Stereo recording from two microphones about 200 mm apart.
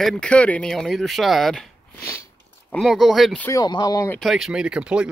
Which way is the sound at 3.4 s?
20° left (ahead or behind).